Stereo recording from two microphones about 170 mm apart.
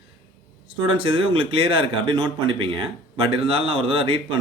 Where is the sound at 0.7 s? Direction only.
30° right (ahead or behind).